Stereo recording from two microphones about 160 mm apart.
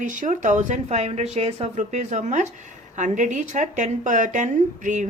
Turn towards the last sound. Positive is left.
turn(degrees=-50)  # may be behind; listen again after turning